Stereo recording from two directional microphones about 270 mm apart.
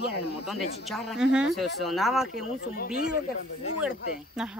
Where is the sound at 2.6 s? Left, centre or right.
Left.